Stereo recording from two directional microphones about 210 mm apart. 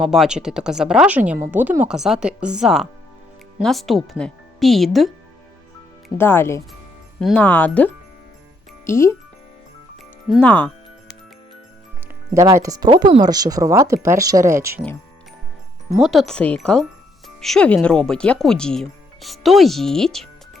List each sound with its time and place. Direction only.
0.0 s speech: centre (ahead or behind)
6.1 s speech: 10° left (ahead or behind)
8.9 s speech: 15° left (ahead or behind)
10.2 s speech: 5° left (ahead or behind)
12.3 s speech: 15° right (ahead or behind)
16.0 s speech: centre (ahead or behind)